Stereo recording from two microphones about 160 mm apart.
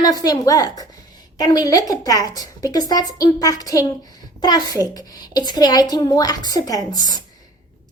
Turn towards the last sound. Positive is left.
turn(degrees=25)  # may be behind; listen again after turning